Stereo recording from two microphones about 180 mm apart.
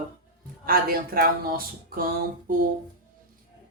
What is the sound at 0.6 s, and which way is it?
Speech, 55° right (ahead or behind).